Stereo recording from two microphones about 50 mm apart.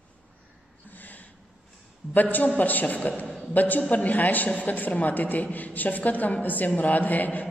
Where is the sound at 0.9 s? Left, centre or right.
Left.